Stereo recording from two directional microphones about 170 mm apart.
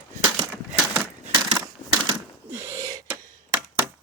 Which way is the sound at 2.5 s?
10° right (ahead or behind).